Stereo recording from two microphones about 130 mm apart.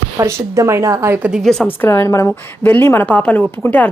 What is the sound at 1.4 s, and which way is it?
Speech, 5° left (ahead or behind).